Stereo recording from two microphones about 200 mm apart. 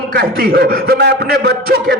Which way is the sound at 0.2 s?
50° right (ahead or behind).